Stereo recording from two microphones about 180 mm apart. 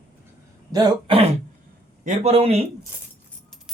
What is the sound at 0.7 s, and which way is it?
Speech, 30° right (ahead or behind).